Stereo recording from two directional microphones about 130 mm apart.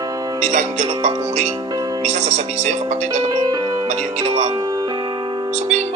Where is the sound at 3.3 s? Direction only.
30° right (ahead or behind).